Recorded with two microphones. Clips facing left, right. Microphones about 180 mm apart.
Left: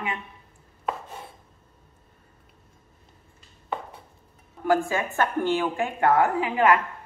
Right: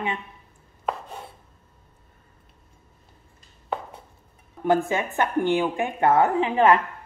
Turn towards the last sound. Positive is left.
turn(degrees=-25)  # may be behind; listen again after turning